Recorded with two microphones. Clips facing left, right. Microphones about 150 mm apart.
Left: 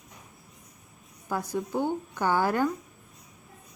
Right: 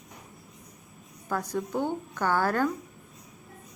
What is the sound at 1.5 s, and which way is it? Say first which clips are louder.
A woman's voice: left 2 dB; 10° left (ahead or behind).